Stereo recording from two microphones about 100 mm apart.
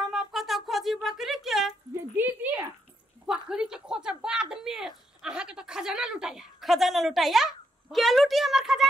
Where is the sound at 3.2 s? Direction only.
5° right (ahead or behind).